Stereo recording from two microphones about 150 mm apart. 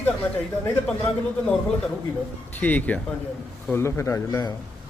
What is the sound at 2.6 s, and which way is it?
A man's voice, 10° left (ahead or behind).